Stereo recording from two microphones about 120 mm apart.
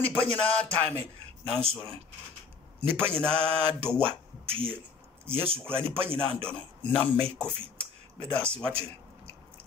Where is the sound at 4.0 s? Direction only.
50° right (ahead or behind).